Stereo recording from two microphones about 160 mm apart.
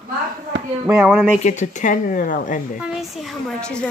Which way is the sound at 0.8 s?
10° right (ahead or behind).